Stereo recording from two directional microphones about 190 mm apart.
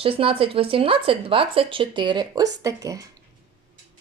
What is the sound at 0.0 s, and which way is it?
Speech, 30° right (ahead or behind).